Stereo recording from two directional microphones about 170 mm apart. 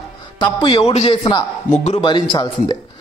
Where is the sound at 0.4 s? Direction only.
30° left (ahead or behind).